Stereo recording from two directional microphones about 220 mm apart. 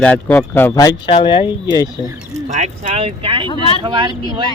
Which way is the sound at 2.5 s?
30° right (ahead or behind).